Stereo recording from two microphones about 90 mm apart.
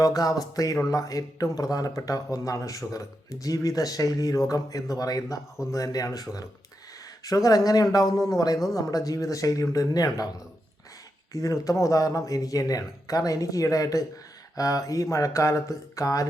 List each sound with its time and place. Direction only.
0.0 s speech: 40° left (ahead or behind)
11.3 s speech: 40° left (ahead or behind)